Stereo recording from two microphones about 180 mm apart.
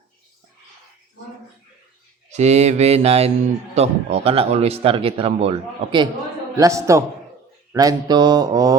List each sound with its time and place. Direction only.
2.3 s speech: 40° right (ahead or behind)
6.6 s a man's voice: 15° right (ahead or behind)
7.7 s mantra: 20° right (ahead or behind)